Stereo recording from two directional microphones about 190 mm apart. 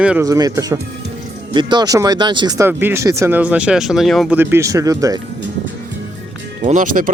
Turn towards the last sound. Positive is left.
turn(degrees=-45)  # may be behind; listen again after turning